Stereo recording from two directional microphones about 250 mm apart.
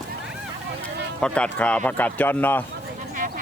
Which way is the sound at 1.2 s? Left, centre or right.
Centre.